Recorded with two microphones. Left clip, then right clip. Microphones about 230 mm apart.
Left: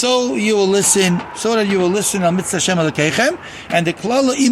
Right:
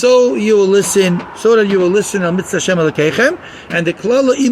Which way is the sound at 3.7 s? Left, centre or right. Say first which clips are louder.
Right 3 dB; left.